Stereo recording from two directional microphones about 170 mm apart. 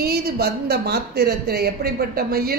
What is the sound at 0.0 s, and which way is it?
A woman's voice, 70° right (ahead or behind).